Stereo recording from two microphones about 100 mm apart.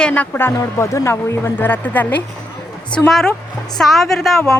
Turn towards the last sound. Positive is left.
turn(degrees=5)  # may be behind; listen again after turning